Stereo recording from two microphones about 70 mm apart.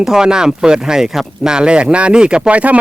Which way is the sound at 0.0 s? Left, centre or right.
Centre.